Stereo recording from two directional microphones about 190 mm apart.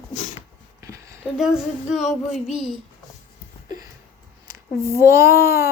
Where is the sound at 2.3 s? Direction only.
Centre (ahead or behind).